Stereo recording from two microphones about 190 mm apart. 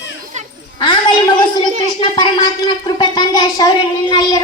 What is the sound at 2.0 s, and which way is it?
A woman's voice, 20° left (ahead or behind).